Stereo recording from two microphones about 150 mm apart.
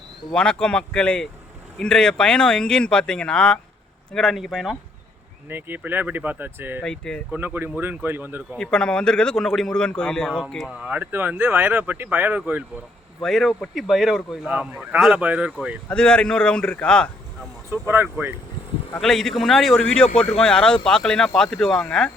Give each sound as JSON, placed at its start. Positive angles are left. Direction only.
{"t": 0.3, "sound": "speech", "side_deg": 5}
{"t": 5.5, "sound": "speech", "side_deg": -15}
{"t": 6.8, "sound": "speech", "side_deg": 5}
{"t": 7.3, "sound": "speech", "side_deg": -10}
{"t": 8.5, "sound": "speech", "side_deg": 5}
{"t": 10.7, "sound": "speech", "side_deg": -10}
{"t": 13.2, "sound": "speech", "side_deg": 0}
{"t": 15.9, "sound": "a man's voice", "side_deg": 5}
{"t": 17.7, "sound": "speech", "side_deg": -15}
{"t": 19.0, "sound": "speech", "side_deg": 0}